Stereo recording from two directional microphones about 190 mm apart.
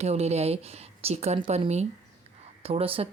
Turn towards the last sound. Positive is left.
turn(degrees=-30)  # may be behind; listen again after turning